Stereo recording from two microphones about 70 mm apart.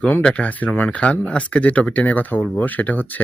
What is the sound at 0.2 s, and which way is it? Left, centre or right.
Speech, centre.